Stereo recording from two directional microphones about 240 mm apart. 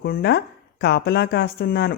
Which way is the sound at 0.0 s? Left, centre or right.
Left.